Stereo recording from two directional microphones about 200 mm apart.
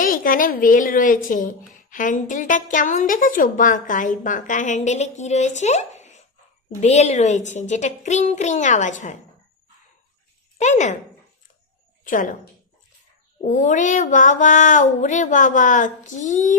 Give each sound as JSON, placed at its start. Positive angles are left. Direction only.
{"t": 0.0, "sound": "a woman's voice", "side_deg": 45}
{"t": 10.6, "sound": "a woman's voice", "side_deg": 35}
{"t": 12.0, "sound": "a woman's voice", "side_deg": 40}
{"t": 13.4, "sound": "a woman's voice", "side_deg": 40}